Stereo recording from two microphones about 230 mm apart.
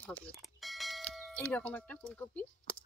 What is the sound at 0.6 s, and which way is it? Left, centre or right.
Doorbell, centre.